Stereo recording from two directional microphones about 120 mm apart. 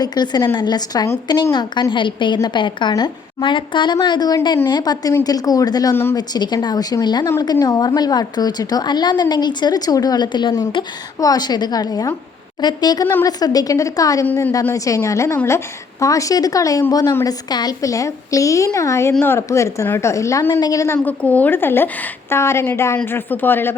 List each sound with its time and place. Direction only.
0.0 s a woman's voice: 35° left (ahead or behind)
5.9 s a woman's voice: 20° left (ahead or behind)
6.1 s a woman's voice: 35° left (ahead or behind); by 23.7 s 15° left (ahead or behind)